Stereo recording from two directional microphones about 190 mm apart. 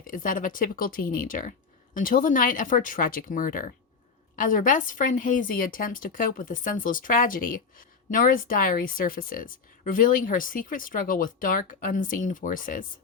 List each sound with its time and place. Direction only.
0.0 s a woman's voice: 45° left (ahead or behind)